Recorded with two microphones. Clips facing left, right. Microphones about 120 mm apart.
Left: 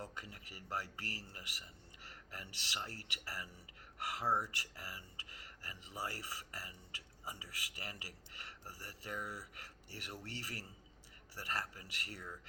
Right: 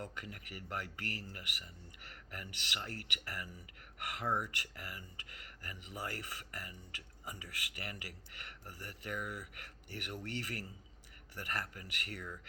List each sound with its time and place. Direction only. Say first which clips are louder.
0.0 s a man's voice: right 3 dB; 30° left (ahead or behind)